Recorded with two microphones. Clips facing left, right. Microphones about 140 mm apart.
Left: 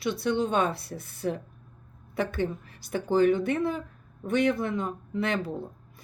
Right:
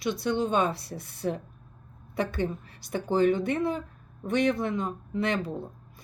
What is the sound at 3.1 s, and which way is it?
Speech, 20° right (ahead or behind).